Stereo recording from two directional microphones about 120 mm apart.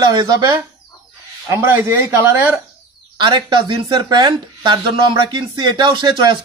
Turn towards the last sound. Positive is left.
turn(degrees=-40)  # may be behind; listen again after turning